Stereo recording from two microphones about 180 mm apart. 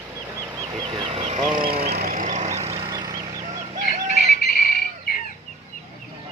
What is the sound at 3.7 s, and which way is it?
Bird, 40° right (ahead or behind).